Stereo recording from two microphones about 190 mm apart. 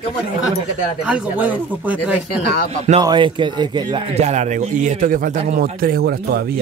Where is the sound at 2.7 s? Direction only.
35° right (ahead or behind).